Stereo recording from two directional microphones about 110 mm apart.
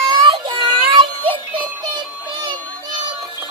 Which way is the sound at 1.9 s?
40° right (ahead or behind).